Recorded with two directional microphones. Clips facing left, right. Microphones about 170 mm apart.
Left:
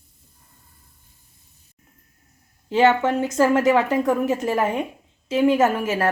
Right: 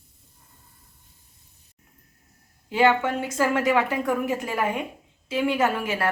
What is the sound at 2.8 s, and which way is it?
Speech, 20° left (ahead or behind).